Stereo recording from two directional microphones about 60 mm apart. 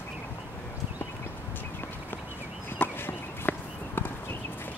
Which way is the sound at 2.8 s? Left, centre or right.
Left.